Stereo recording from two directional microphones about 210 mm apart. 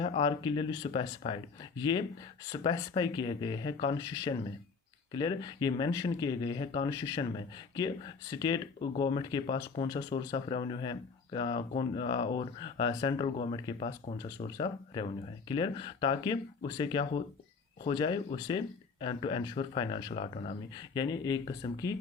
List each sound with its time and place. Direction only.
0.0 s speech: 25° left (ahead or behind)